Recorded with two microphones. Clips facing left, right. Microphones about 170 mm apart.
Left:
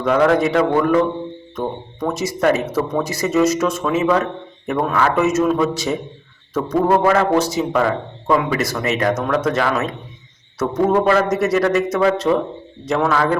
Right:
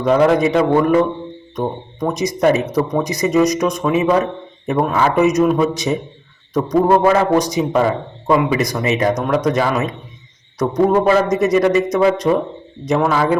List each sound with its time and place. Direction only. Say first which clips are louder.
0.0 s a man's voice: right 2 dB; 20° right (ahead or behind)